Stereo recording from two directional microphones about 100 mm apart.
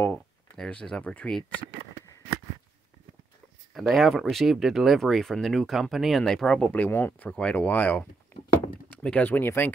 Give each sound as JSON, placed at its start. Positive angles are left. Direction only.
{"t": 0.0, "sound": "speech", "side_deg": 15}
{"t": 3.7, "sound": "speech", "side_deg": 0}
{"t": 8.3, "sound": "a sound", "side_deg": 25}
{"t": 8.9, "sound": "speech", "side_deg": 15}